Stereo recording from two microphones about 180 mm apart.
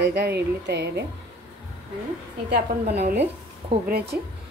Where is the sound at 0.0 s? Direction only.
70° right (ahead or behind).